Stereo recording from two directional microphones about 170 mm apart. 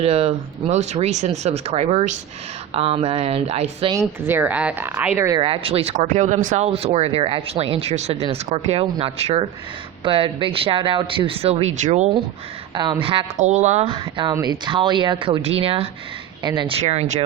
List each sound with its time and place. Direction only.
0.0 s speech: 35° right (ahead or behind)
4.0 s a woman's voice: 10° right (ahead or behind)
5.4 s speech: 35° right (ahead or behind)
12.7 s speech: 25° right (ahead or behind)
13.3 s speech: 45° right (ahead or behind)
13.9 s speech: 25° right (ahead or behind)